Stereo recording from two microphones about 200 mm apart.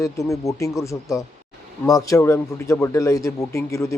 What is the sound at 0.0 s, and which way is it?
Speech, 15° left (ahead or behind).